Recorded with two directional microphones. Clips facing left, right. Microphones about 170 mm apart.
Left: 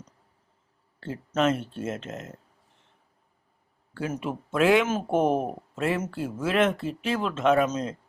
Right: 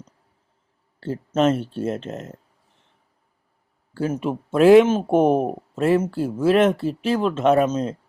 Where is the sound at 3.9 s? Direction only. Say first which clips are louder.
Right 7 dB; 35° right (ahead or behind).